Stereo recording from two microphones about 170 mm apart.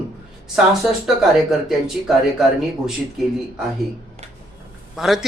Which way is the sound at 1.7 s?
Centre (ahead or behind).